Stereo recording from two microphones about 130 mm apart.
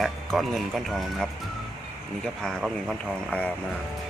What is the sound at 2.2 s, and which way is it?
Speech, 5° left (ahead or behind).